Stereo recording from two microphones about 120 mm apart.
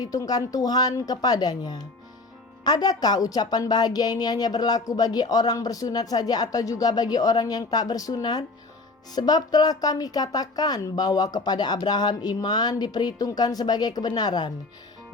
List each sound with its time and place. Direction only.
0.0 s a woman's voice: 30° left (ahead or behind)